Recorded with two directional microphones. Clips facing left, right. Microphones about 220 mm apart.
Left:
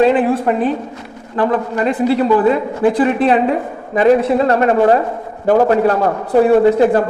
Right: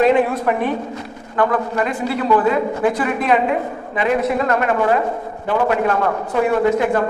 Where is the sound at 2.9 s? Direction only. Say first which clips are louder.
Left 5 dB; 30° left (ahead or behind).